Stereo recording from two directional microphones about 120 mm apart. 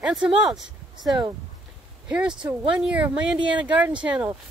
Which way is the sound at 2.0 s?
5° right (ahead or behind).